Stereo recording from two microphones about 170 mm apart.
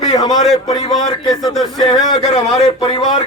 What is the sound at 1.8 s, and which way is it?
Speech, 25° left (ahead or behind).